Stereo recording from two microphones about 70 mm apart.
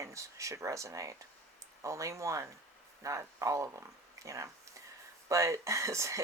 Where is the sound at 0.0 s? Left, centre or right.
Right.